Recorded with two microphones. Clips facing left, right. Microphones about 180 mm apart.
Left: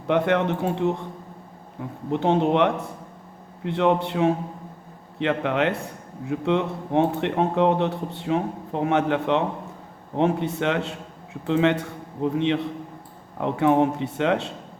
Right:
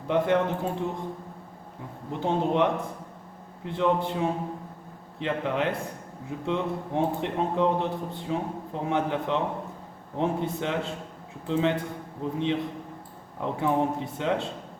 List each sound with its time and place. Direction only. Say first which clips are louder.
0.1 s speech: left 3 dB; 70° left (ahead or behind)
2.0 s speech: left 6 dB; 75° left (ahead or behind)